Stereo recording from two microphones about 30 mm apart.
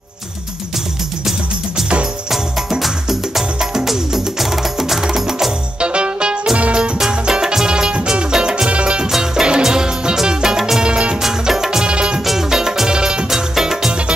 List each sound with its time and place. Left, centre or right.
2.8 s music: centre
3.8 s wood block: centre
5.8 s music: right
7.1 s music: right
8.3 s music: right
8.6 s music: right
9.2 s music: right
10.8 s music: right
11.2 s music: centre
11.8 s music: right
12.4 s music: centre
12.9 s music: right
13.3 s music: centre